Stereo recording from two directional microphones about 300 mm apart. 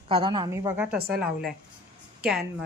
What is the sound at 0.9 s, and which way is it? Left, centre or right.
Speech, right.